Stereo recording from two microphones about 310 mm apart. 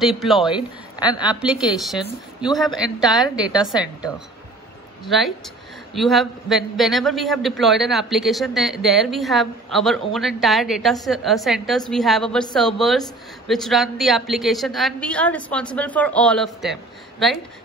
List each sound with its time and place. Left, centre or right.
0.0 s a man's voice: centre